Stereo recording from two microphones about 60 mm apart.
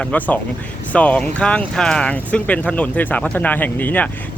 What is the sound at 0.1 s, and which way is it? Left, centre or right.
Speech, left.